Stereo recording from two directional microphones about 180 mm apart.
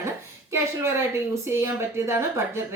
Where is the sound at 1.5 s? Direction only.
15° right (ahead or behind).